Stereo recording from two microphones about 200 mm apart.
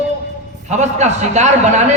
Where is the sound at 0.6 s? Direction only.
35° right (ahead or behind).